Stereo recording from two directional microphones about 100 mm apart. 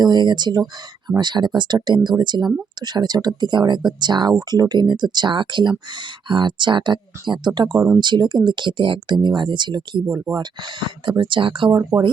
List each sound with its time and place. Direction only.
0.0 s speech: 45° right (ahead or behind)
11.7 s speech: 30° right (ahead or behind)